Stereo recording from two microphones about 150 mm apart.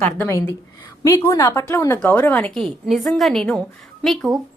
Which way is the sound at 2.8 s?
Centre (ahead or behind).